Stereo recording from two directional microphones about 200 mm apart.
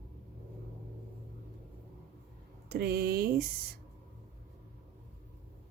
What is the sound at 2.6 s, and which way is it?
Speech, 50° right (ahead or behind).